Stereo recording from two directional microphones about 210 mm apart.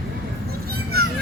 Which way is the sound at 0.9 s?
50° right (ahead or behind).